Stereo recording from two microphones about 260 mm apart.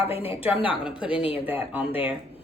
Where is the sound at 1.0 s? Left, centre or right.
Left.